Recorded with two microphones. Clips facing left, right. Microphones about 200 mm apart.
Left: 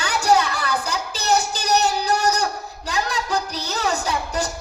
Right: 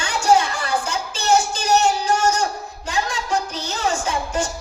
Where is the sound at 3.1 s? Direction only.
35° left (ahead or behind).